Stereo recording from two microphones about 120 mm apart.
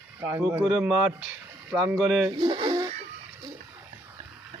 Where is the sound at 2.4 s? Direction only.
40° right (ahead or behind).